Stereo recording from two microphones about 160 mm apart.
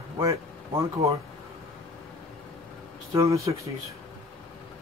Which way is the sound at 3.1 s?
20° right (ahead or behind).